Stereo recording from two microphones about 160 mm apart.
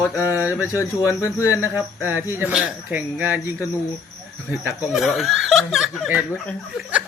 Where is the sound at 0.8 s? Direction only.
20° left (ahead or behind).